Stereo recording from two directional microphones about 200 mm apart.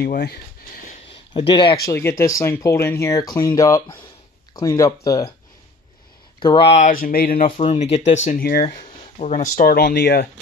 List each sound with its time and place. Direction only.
0.0 s speech: 50° left (ahead or behind)
1.3 s speech: 25° left (ahead or behind)
1.9 s speech: 15° left (ahead or behind)
6.4 s speech: 25° left (ahead or behind); by 7.5 s 45° left (ahead or behind)
7.5 s speech: 30° left (ahead or behind); by 8.6 s 45° left (ahead or behind)
8.6 s a sound: 30° left (ahead or behind)
9.4 s speech: 45° left (ahead or behind)